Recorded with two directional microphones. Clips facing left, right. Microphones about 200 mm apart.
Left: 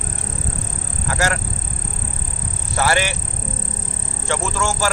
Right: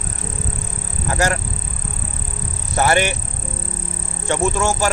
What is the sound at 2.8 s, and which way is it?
Speech, 20° right (ahead or behind).